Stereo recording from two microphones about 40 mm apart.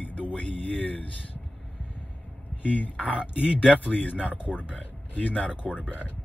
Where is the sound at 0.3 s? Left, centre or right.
Left.